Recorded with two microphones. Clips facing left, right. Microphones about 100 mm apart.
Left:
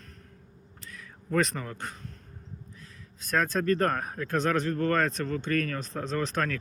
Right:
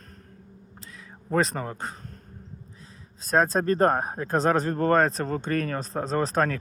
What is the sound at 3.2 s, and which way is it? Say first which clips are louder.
Speech: right 5 dB; 35° right (ahead or behind).